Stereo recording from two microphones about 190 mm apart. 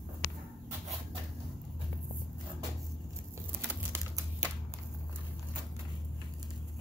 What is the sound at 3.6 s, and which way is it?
Typing, 10° right (ahead or behind).